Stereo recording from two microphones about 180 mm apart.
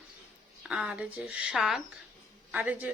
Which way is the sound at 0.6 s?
5° right (ahead or behind).